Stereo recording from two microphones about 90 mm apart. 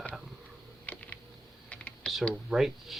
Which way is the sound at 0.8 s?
15° left (ahead or behind).